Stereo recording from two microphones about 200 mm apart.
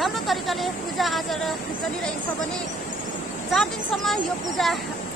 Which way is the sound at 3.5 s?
Centre (ahead or behind).